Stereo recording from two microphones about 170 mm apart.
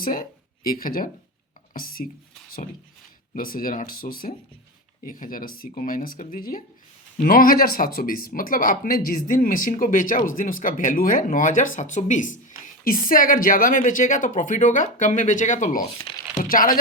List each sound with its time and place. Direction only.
0.0 s speech: 55° left (ahead or behind)
3.3 s speech: 55° left (ahead or behind)